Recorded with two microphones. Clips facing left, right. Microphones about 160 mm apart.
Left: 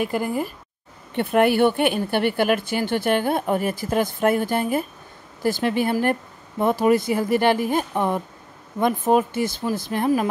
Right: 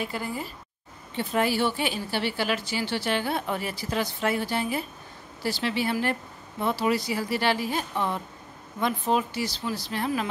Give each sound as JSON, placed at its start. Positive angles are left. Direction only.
{"t": 0.0, "sound": "a woman's voice", "side_deg": 55}